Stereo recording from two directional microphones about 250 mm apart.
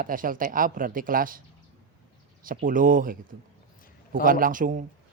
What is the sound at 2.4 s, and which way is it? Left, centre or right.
Speech, right.